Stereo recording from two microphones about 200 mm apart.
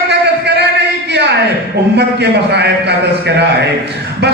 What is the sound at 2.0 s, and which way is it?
A man's voice, 55° right (ahead or behind).